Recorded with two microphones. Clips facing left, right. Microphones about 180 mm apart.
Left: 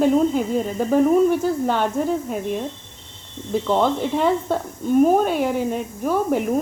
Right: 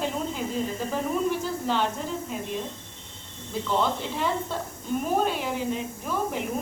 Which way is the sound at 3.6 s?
50° left (ahead or behind).